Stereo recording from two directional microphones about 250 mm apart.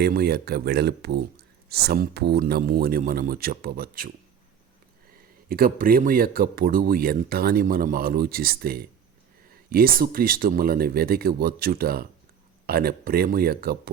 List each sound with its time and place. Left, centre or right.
0.0 s speech: right
5.5 s speech: right